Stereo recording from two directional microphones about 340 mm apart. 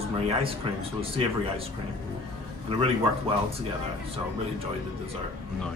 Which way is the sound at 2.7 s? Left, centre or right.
Centre.